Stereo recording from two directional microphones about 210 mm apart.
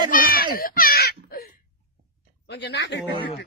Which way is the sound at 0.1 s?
45° left (ahead or behind).